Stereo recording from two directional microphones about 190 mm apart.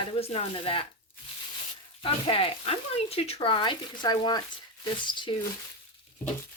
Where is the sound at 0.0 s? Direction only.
30° left (ahead or behind).